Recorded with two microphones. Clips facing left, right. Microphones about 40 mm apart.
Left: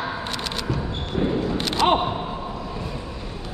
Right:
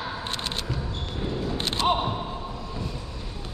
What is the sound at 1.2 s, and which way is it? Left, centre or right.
Single-lens reflex camera, left.